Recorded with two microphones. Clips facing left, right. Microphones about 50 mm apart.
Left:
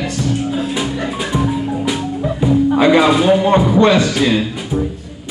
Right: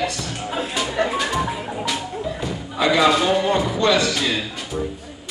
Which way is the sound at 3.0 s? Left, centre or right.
Centre.